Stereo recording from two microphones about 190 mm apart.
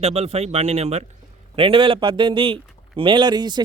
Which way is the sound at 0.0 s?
35° right (ahead or behind).